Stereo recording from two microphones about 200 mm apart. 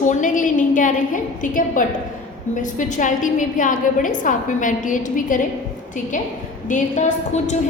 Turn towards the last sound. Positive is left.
turn(degrees=35)  # may be behind; listen again after turning